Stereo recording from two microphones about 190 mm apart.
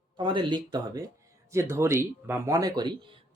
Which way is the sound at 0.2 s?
25° right (ahead or behind).